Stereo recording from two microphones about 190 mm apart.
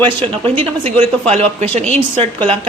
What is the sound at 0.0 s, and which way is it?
A woman's voice, 25° right (ahead or behind).